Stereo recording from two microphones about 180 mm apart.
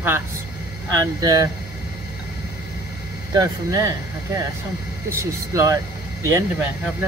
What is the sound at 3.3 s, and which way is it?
Speech, 15° right (ahead or behind).